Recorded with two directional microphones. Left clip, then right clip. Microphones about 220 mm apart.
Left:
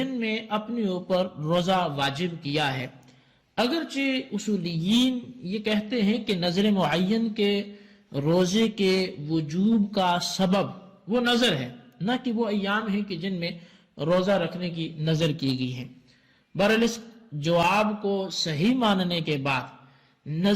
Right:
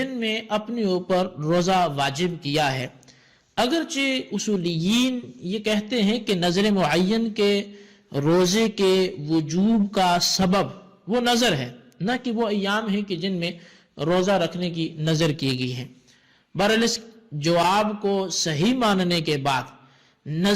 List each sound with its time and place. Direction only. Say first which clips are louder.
0.0 s a man's voice: right 3 dB; 40° right (ahead or behind)